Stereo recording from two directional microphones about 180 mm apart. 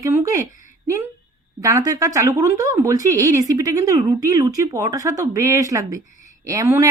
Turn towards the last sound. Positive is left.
turn(degrees=-15)  # may be behind; listen again after turning